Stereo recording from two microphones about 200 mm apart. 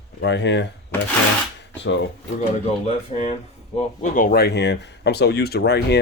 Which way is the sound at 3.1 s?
30° left (ahead or behind).